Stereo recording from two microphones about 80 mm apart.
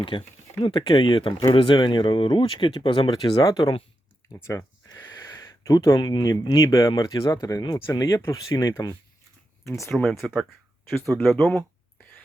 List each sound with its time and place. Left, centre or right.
0.6 s speech: left
3.3 s speech: left
4.4 s speech: left
5.6 s speech: left
6.0 s speech: left
6.6 s speech: left
7.6 s speech: left
7.9 s speech: left
9.9 s speech: centre